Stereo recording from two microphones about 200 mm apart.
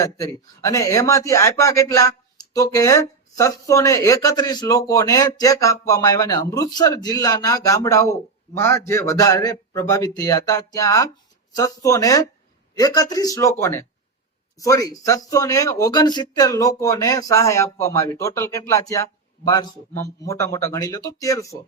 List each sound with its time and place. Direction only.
0.0 s speech: 15° left (ahead or behind)